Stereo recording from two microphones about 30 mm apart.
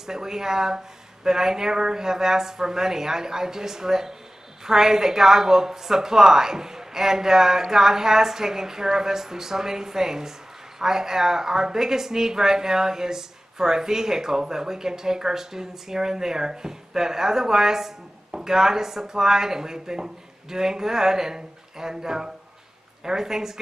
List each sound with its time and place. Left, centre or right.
0.0 s a woman's voice: centre